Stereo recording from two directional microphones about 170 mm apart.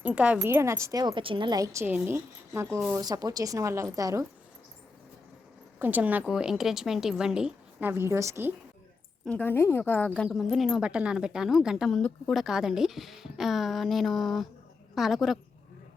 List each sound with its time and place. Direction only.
0.0 s a woman's voice: 5° right (ahead or behind)
5.8 s speech: 10° right (ahead or behind)
9.2 s speech: 10° left (ahead or behind)